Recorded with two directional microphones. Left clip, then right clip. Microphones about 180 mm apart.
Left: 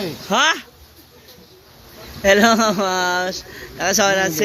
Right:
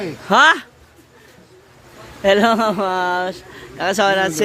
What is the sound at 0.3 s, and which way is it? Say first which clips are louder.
Speech: right 5 dB; 30° right (ahead or behind).